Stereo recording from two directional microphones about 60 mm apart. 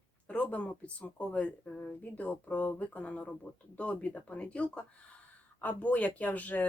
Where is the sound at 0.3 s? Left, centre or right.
Left.